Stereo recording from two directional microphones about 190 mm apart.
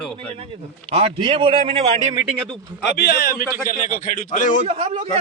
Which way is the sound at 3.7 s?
45° left (ahead or behind).